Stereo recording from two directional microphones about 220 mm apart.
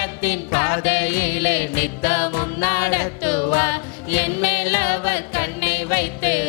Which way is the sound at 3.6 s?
10° left (ahead or behind).